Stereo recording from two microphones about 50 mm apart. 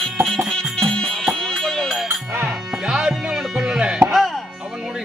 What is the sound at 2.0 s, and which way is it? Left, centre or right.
Music, right.